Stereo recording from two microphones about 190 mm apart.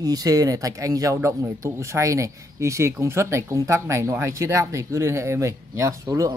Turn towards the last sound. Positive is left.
turn(degrees=-15)  # may be behind; listen again after turning